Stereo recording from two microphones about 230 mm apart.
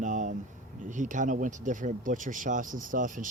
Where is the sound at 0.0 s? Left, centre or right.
Right.